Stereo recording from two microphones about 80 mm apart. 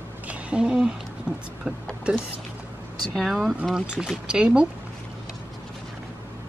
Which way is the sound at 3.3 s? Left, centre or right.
Centre.